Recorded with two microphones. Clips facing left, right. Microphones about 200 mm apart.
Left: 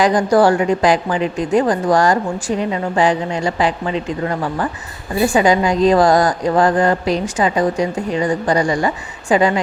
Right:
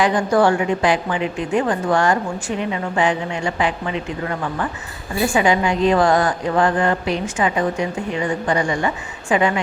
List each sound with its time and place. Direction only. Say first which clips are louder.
0.0 s a woman's voice: left 3 dB; 35° left (ahead or behind)